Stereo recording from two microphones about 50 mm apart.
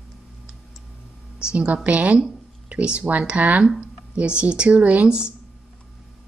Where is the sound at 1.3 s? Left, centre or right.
Right.